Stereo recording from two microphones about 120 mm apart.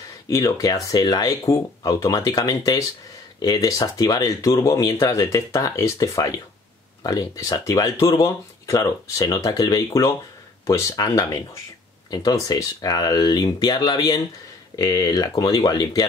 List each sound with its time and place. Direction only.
0.3 s speech: 30° left (ahead or behind)